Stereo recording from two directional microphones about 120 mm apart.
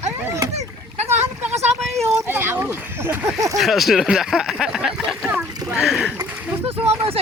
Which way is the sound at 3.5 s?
Centre (ahead or behind).